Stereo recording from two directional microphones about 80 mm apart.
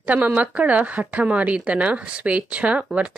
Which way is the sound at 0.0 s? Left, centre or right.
Centre.